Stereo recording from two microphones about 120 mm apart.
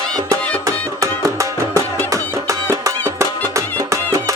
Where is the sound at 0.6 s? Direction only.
25° right (ahead or behind).